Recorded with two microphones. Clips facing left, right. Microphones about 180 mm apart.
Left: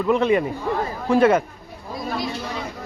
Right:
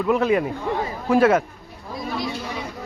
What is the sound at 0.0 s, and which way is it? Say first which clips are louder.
Speech: left 1 dB; centre (ahead or behind).